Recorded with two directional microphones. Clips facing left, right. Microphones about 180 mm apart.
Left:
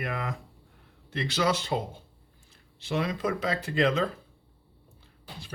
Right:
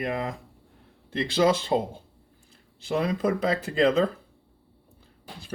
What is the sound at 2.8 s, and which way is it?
Speech, 35° right (ahead or behind).